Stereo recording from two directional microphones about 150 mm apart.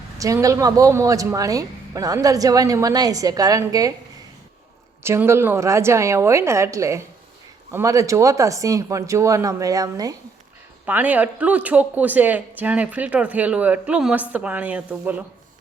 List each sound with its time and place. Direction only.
0.2 s a woman's voice: 20° right (ahead or behind)
5.0 s a woman's voice: 15° right (ahead or behind)
10.8 s speech: 10° right (ahead or behind)